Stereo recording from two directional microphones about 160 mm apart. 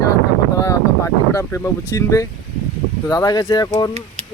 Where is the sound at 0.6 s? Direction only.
20° left (ahead or behind).